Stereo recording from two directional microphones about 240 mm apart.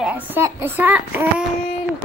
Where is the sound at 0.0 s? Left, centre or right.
Centre.